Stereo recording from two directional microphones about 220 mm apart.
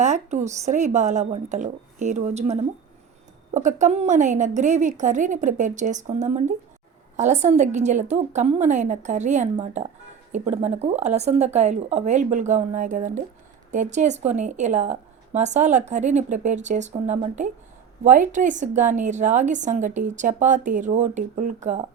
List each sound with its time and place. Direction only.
0.0 s a woman's voice: 30° right (ahead or behind)